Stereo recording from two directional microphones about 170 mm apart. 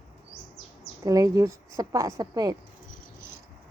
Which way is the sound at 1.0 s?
20° right (ahead or behind).